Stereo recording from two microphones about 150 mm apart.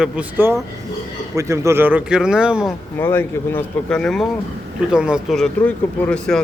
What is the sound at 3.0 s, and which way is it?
Speech, 15° left (ahead or behind).